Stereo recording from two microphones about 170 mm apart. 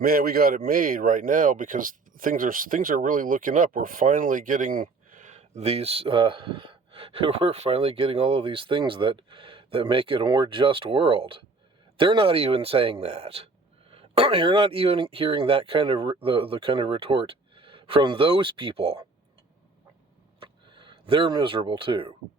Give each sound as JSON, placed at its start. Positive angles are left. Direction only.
{"t": 0.0, "sound": "speech", "side_deg": -60}
{"t": 20.4, "sound": "speech", "side_deg": -30}